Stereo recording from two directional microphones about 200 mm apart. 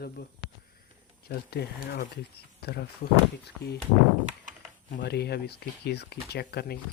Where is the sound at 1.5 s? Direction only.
55° left (ahead or behind).